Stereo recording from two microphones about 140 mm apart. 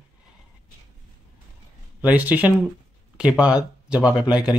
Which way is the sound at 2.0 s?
10° right (ahead or behind).